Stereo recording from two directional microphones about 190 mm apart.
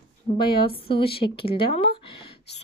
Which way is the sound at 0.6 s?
30° left (ahead or behind).